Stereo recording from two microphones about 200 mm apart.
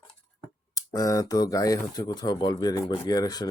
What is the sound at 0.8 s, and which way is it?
A man's voice, 15° left (ahead or behind).